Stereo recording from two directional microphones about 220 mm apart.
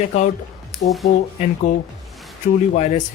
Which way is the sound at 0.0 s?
35° left (ahead or behind).